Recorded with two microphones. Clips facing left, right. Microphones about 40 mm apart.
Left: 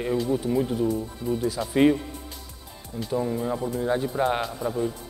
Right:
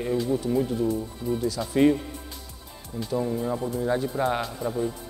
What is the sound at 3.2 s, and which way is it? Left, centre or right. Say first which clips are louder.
Speech: even; centre.